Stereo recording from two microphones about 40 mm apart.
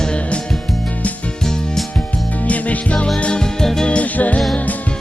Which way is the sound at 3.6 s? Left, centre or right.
Centre.